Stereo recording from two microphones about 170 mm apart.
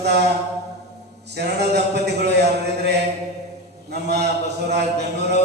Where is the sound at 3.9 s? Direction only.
75° right (ahead or behind).